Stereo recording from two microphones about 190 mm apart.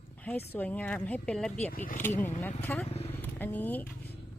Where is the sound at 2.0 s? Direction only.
10° left (ahead or behind).